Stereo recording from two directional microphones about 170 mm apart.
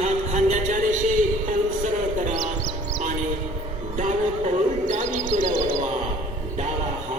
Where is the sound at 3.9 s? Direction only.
45° right (ahead or behind).